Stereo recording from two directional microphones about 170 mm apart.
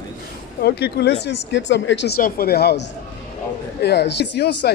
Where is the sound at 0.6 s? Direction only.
70° left (ahead or behind).